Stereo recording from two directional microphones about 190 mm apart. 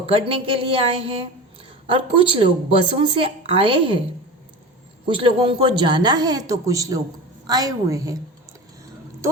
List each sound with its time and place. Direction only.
0.0 s speech: 30° right (ahead or behind)
5.0 s speech: 25° right (ahead or behind)